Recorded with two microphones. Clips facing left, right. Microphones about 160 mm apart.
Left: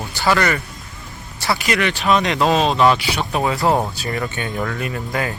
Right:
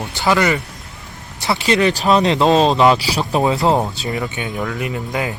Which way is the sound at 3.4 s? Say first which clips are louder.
Right 2 dB; 20° right (ahead or behind).